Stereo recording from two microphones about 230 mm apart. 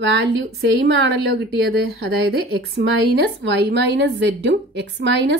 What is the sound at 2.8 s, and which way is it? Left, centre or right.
A woman's voice, right.